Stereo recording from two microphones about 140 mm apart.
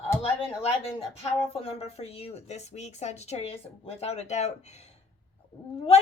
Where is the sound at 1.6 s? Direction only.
45° left (ahead or behind).